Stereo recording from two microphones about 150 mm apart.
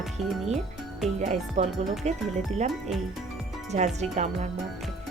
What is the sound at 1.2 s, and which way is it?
Speech, 50° right (ahead or behind).